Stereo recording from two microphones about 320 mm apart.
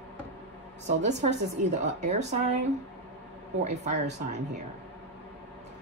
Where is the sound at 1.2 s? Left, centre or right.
Right.